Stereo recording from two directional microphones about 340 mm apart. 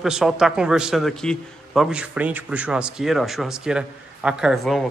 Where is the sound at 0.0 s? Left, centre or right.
Centre.